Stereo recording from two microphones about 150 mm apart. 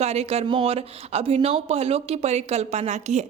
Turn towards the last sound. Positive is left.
turn(degrees=-50)  # may be behind; listen again after turning